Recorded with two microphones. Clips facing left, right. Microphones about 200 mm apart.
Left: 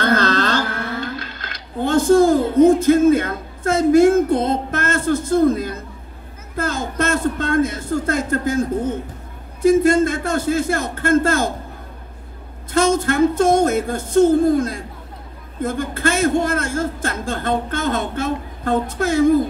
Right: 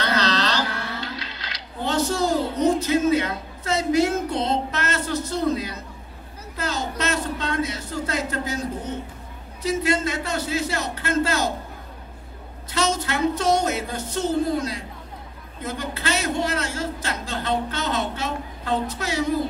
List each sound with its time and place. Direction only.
0.0 s a sound: 50° left (ahead or behind)
9.6 s a man's voice: 50° left (ahead or behind)
12.7 s a man's voice: 50° left (ahead or behind)